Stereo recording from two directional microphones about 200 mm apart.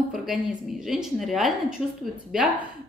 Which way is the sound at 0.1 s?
Centre (ahead or behind).